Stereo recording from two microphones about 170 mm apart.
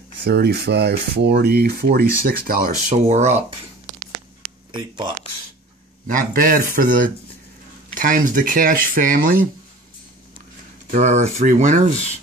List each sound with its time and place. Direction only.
0.2 s speech: 75° right (ahead or behind); by 3.3 s 40° right (ahead or behind)
4.7 s speech: 25° right (ahead or behind)
6.0 s speech: 50° right (ahead or behind)
7.9 s speech: 50° right (ahead or behind)
10.9 s speech: 45° right (ahead or behind)